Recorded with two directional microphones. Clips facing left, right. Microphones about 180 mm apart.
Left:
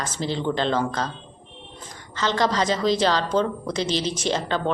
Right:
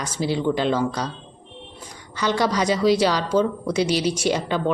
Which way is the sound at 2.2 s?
10° right (ahead or behind).